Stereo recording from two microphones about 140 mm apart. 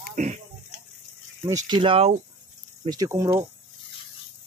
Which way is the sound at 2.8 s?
25° right (ahead or behind).